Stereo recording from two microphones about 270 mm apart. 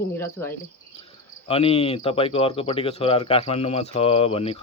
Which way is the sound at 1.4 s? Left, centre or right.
Left.